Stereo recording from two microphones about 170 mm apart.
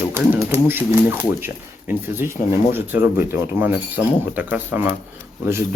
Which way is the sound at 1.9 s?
10° right (ahead or behind).